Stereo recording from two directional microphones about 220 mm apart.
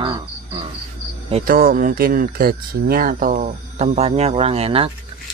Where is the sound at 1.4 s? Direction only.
40° right (ahead or behind).